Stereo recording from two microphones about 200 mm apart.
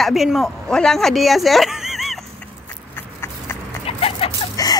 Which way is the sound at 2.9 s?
10° left (ahead or behind).